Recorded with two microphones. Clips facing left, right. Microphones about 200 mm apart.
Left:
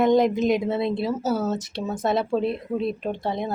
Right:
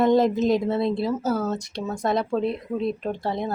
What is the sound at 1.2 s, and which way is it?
Speech, centre (ahead or behind).